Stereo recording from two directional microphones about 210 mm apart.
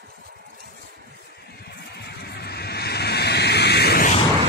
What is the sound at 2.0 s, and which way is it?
Vehicle, 50° left (ahead or behind).